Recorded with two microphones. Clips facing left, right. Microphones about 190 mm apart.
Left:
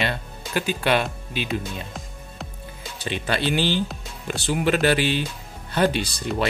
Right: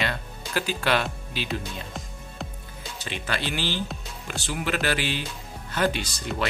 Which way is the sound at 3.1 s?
20° left (ahead or behind).